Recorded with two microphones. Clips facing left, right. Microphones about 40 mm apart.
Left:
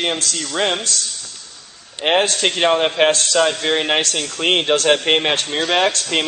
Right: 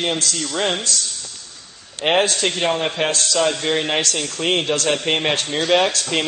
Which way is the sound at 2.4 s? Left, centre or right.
Left.